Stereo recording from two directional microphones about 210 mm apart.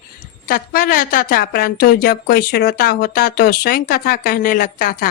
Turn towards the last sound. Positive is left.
turn(degrees=45)  # may be behind; listen again after turning